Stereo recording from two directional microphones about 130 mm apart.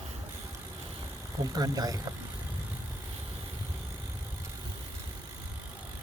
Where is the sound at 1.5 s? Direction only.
30° right (ahead or behind).